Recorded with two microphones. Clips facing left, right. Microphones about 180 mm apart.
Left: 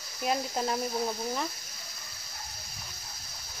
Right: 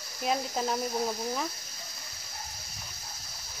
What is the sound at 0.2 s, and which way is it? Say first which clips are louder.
Speech: even; centre (ahead or behind).